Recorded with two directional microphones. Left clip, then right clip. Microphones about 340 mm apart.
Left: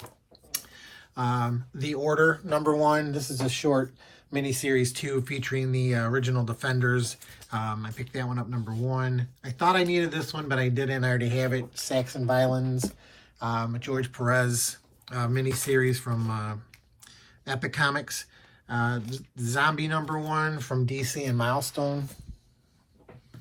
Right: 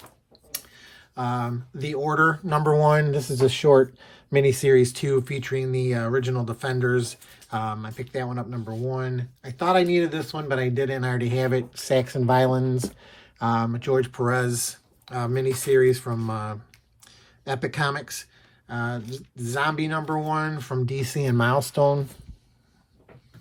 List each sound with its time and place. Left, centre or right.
0.5 s speech: centre